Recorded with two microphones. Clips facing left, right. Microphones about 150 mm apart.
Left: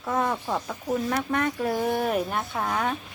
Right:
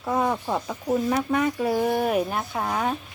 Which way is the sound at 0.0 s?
15° right (ahead or behind).